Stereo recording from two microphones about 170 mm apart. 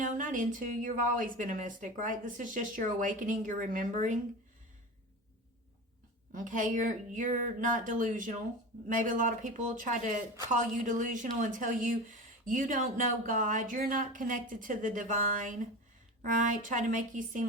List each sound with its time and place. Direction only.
0.0 s speech: 50° right (ahead or behind)
6.3 s speech: 50° right (ahead or behind)